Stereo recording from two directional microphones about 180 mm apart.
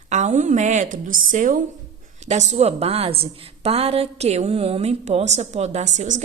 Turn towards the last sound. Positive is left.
turn(degrees=-40)  # may be behind; listen again after turning